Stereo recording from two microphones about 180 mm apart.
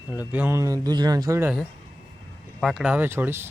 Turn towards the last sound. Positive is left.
turn(degrees=-15)  # may be behind; listen again after turning